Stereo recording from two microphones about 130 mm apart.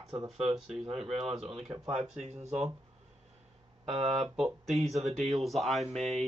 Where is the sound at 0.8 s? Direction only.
50° right (ahead or behind).